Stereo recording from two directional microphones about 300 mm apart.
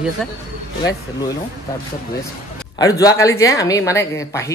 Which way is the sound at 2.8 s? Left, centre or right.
Centre.